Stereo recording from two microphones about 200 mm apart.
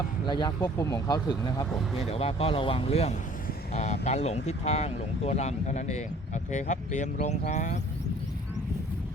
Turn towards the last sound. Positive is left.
turn(degrees=35)  # may be behind; listen again after turning